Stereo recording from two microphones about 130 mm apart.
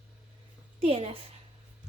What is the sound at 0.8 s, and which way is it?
Speech, 45° right (ahead or behind).